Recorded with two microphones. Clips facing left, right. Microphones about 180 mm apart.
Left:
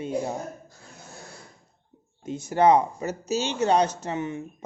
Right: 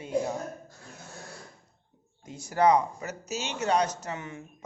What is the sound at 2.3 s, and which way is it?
Speech, 25° left (ahead or behind).